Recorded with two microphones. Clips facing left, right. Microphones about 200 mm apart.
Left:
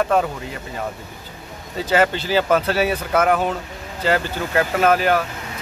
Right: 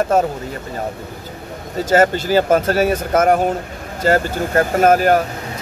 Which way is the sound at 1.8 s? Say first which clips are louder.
Right 4 dB; 45° right (ahead or behind).